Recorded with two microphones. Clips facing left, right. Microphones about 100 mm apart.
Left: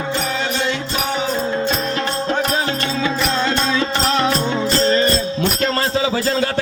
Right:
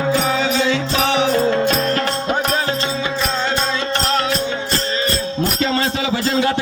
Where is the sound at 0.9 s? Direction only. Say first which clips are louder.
Right 5 dB; 90° right.